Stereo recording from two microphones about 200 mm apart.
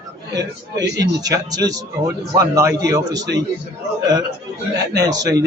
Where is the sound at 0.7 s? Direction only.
60° right (ahead or behind).